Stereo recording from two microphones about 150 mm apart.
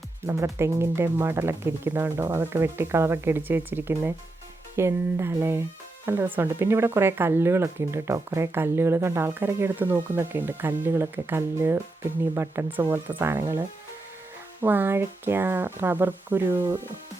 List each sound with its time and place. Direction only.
0.3 s speech: 20° right (ahead or behind)